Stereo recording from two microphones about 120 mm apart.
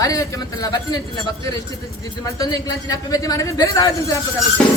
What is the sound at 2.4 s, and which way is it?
A man's voice, 30° left (ahead or behind).